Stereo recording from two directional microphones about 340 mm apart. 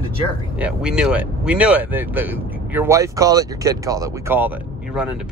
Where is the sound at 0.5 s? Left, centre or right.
Centre.